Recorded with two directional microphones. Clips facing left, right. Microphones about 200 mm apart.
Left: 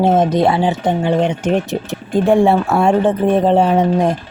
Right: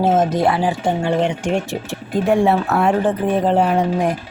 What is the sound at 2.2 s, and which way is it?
Speech, 30° left (ahead or behind).